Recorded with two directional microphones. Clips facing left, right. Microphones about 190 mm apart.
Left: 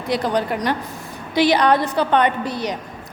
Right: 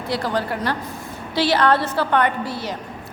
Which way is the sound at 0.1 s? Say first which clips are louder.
Left 3 dB; 20° left (ahead or behind).